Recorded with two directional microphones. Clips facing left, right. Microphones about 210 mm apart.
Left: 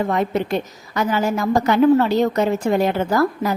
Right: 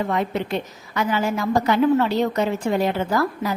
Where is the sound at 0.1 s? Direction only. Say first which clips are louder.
Left 3 dB; 45° left (ahead or behind).